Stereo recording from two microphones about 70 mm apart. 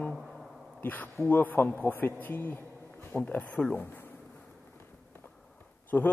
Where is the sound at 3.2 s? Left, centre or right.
Centre.